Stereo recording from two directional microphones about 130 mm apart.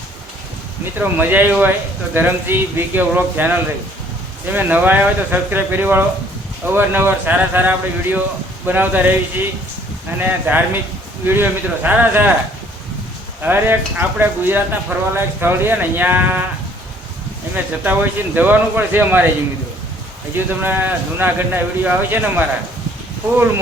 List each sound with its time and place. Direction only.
0.9 s speech: 15° right (ahead or behind)
4.5 s speech: 15° right (ahead or behind)
10.2 s speech: 15° right (ahead or behind)
13.4 s speech: 15° right (ahead or behind)
17.5 s speech: 15° right (ahead or behind)
20.3 s speech: 15° right (ahead or behind)